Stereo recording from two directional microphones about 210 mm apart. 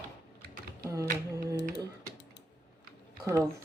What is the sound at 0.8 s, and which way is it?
Speech, 15° right (ahead or behind).